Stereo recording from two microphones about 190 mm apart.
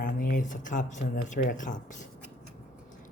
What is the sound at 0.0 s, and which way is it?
Speech, 45° left (ahead or behind).